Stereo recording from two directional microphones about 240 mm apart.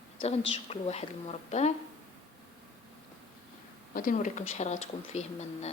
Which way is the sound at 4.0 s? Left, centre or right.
Left.